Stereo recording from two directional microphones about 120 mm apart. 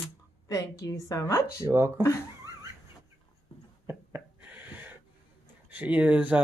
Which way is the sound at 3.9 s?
15° right (ahead or behind).